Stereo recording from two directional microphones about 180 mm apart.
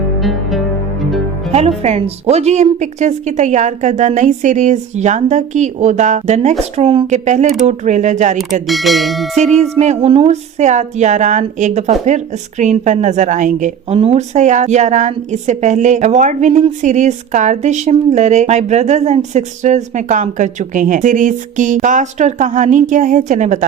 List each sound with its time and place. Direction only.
0.2 s music: centre (ahead or behind)
1.5 s a woman's voice: 35° right (ahead or behind)
8.6 s speech: centre (ahead or behind)
9.3 s a woman's voice: 40° right (ahead or behind)